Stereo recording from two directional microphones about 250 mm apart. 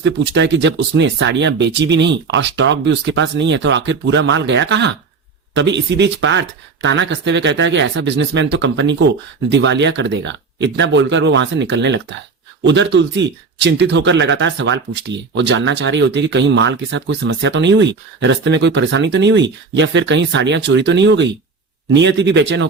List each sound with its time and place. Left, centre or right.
0.0 s speech: right